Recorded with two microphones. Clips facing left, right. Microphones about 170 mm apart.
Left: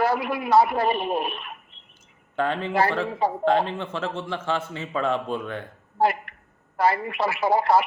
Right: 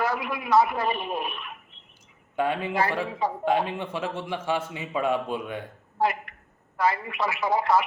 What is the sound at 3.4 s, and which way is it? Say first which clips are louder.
A man's voice: left 2 dB; 10° right (ahead or behind).